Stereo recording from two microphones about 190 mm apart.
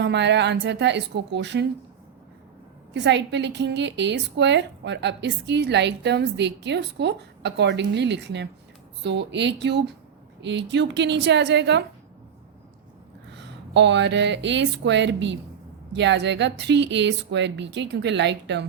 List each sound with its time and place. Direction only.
0.0 s a woman's voice: 65° right (ahead or behind)
2.9 s a woman's voice: 70° right (ahead or behind)
13.3 s speech: 65° right (ahead or behind)